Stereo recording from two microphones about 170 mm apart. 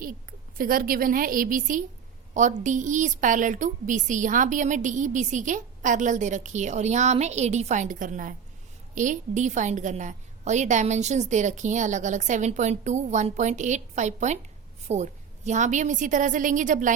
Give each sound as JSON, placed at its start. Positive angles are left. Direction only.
{"t": 0.0, "sound": "a woman's voice", "side_deg": -55}